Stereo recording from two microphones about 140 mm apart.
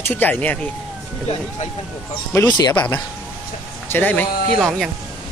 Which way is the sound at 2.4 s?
30° left (ahead or behind).